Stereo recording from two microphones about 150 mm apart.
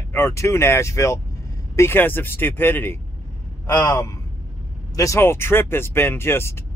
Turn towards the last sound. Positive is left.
turn(degrees=15)  # may be behind; listen again after turning